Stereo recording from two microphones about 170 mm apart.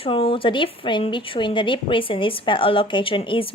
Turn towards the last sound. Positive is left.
turn(degrees=30)  # may be behind; listen again after turning